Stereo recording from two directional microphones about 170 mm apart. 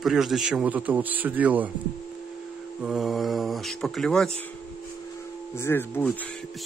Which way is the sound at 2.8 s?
Centre (ahead or behind).